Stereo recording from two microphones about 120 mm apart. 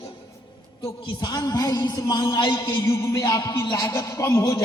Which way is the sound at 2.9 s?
25° left (ahead or behind).